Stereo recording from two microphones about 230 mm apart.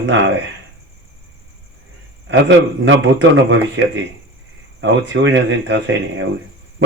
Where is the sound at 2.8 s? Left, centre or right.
Right.